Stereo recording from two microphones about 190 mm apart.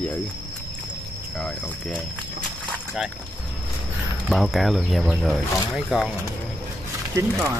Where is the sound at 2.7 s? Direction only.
5° right (ahead or behind).